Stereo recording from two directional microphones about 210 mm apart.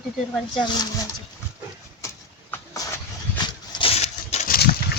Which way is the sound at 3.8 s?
30° left (ahead or behind).